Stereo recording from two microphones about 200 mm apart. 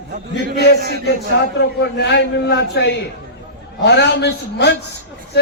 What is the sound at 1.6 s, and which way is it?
Speech, 55° left (ahead or behind).